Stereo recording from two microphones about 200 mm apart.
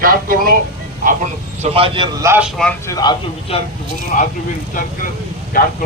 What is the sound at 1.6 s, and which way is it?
Speech, 30° right (ahead or behind).